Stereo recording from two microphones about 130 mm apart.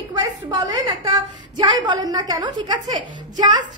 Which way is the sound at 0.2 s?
25° right (ahead or behind).